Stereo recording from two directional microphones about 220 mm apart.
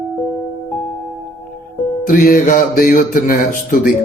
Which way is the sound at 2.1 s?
40° left (ahead or behind).